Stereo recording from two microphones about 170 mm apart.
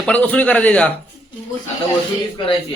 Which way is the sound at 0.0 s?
10° left (ahead or behind).